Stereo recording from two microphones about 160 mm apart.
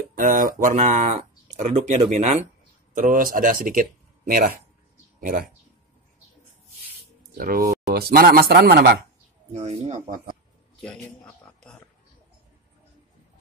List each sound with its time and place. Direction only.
0.1 s speech: 60° right (ahead or behind)
7.3 s speech: 65° right (ahead or behind); by 8.9 s 90° right
9.5 s speech: 45° right (ahead or behind)